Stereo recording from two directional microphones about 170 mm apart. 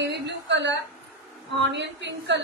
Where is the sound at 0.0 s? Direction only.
90° right.